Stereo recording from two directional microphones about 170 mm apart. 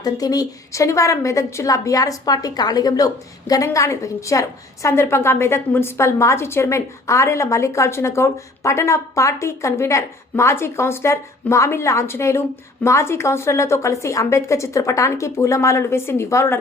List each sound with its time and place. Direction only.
0.0 s a woman's voice: 20° left (ahead or behind)